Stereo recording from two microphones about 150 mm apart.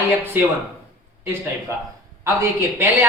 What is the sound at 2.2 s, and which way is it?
Speech, 15° right (ahead or behind).